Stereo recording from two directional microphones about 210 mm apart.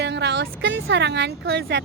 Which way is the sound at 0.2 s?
55° right (ahead or behind).